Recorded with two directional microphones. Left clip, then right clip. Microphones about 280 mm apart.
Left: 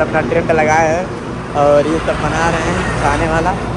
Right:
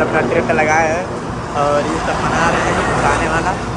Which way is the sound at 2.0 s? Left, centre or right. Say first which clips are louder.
Left 1 dB; right.